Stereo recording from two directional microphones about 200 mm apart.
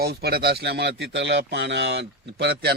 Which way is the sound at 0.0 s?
50° right (ahead or behind).